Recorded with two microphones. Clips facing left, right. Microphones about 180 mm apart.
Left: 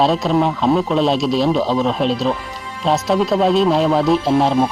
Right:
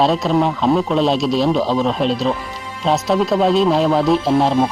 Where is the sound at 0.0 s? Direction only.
Centre (ahead or behind).